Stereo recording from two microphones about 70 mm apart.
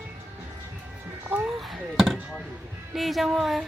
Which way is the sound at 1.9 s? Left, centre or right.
Centre.